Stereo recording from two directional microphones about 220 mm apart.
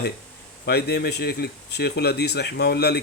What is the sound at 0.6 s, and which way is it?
Speech, 50° left (ahead or behind).